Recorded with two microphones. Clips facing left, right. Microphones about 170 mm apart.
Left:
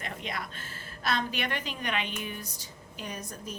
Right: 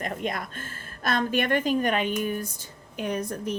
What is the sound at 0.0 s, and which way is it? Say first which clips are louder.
A woman's voice: right 7 dB; 45° right (ahead or behind).